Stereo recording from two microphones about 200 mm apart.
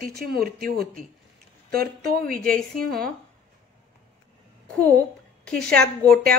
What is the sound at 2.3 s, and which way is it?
Speech, 45° right (ahead or behind).